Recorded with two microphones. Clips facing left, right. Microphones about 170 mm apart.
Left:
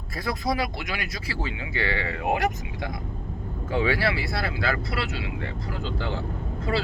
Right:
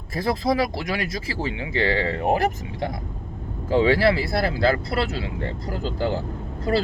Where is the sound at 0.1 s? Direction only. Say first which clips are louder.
Right 5 dB; 25° right (ahead or behind).